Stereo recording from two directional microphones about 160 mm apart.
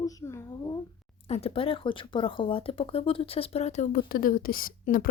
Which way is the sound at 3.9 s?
65° left (ahead or behind).